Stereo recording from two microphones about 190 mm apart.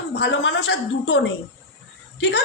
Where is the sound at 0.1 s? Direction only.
70° left (ahead or behind).